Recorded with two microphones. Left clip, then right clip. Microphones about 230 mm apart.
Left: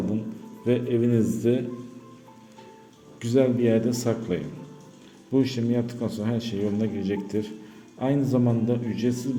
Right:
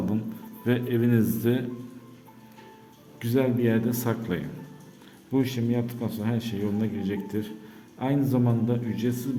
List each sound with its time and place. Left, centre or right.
0.6 s a man's voice: centre
3.2 s a man's voice: centre